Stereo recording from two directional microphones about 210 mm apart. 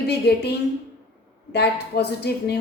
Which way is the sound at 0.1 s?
50° left (ahead or behind).